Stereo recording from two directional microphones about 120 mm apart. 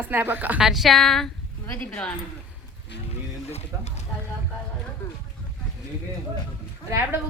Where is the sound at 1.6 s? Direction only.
15° left (ahead or behind).